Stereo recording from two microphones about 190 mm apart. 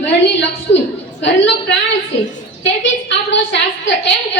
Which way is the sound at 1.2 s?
70° left (ahead or behind).